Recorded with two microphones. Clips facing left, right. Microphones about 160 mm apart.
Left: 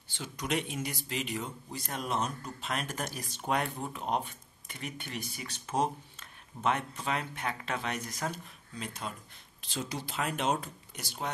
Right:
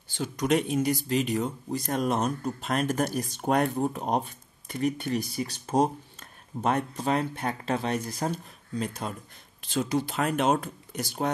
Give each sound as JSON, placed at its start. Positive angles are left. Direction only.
{"t": 0.1, "sound": "speech", "side_deg": -45}